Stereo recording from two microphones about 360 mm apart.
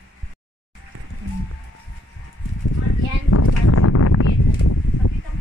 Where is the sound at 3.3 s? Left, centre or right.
Left.